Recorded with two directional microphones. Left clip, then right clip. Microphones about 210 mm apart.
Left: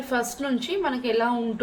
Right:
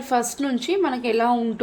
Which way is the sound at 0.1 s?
40° right (ahead or behind).